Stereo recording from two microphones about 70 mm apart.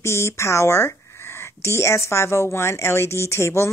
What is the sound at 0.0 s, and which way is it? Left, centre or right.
Speech, left.